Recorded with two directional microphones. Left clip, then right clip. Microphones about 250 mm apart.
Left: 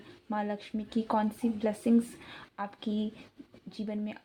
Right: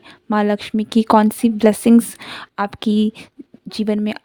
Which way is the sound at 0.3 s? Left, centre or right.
Right.